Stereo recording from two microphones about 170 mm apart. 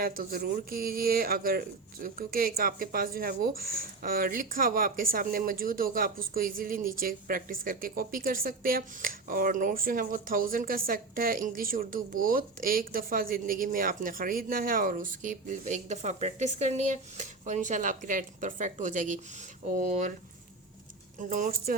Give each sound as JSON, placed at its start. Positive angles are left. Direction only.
{"t": 0.0, "sound": "speech", "side_deg": -55}
{"t": 21.2, "sound": "speech", "side_deg": -50}